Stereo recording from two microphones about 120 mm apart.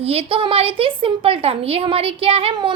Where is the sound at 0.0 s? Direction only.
55° right (ahead or behind).